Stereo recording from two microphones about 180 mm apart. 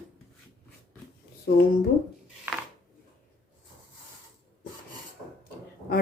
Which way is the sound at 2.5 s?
10° right (ahead or behind).